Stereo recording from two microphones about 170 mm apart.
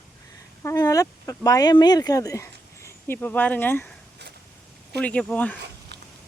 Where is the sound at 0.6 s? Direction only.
20° left (ahead or behind).